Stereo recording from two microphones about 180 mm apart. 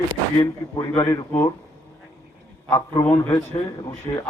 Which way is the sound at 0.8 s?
20° left (ahead or behind).